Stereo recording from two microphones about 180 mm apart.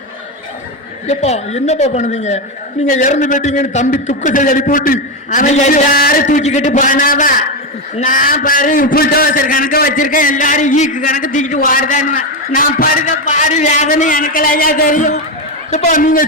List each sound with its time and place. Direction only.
1.0 s a woman's voice: 40° left (ahead or behind)